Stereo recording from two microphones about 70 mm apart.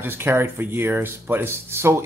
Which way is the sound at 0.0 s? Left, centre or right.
Right.